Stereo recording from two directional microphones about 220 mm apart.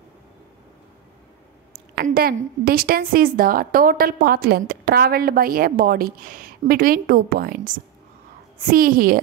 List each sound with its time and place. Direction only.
2.0 s a woman's voice: 45° right (ahead or behind)